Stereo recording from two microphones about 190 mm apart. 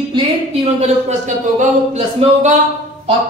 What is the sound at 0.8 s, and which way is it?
Speech, 40° right (ahead or behind).